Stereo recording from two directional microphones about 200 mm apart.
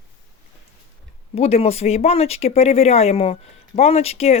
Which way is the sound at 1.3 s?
30° left (ahead or behind).